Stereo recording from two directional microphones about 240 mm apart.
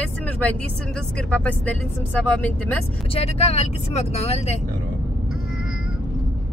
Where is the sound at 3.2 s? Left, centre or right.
Left.